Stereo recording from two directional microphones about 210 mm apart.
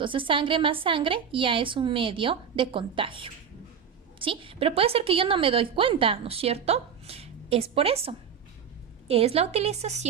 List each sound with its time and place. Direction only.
0.0 s a woman's voice: 25° right (ahead or behind)